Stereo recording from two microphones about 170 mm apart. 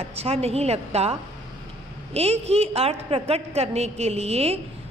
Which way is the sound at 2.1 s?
40° right (ahead or behind).